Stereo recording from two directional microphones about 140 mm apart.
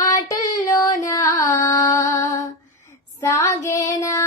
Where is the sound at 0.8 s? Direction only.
25° left (ahead or behind).